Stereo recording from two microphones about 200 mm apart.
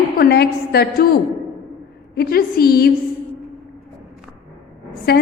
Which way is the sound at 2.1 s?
50° left (ahead or behind).